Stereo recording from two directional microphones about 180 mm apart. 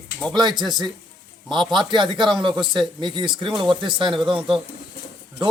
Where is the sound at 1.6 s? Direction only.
Centre (ahead or behind).